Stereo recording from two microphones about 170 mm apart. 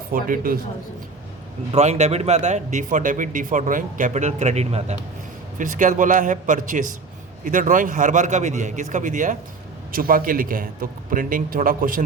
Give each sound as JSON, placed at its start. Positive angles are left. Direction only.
{"t": 0.1, "sound": "a man's voice", "side_deg": -55}
{"t": 1.7, "sound": "a man's voice", "side_deg": -40}